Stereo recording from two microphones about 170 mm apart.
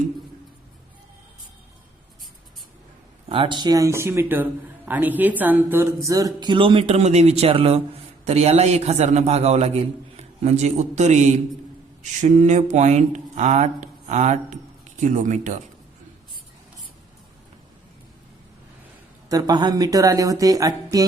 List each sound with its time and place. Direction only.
3.2 s a man's voice: 30° right (ahead or behind); by 15.6 s 45° right (ahead or behind)
19.3 s speech: 25° right (ahead or behind)